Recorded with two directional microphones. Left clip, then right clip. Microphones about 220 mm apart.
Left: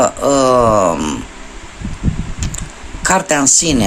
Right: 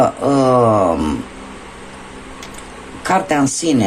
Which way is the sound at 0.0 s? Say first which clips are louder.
Left 2 dB; 25° left (ahead or behind).